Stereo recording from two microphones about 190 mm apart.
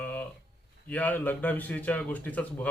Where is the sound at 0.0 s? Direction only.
10° left (ahead or behind).